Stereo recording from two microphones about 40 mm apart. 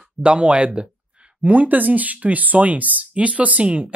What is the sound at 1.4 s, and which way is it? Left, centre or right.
Speech, right.